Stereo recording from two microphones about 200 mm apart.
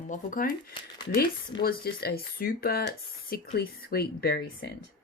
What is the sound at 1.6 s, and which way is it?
Speech, 50° left (ahead or behind).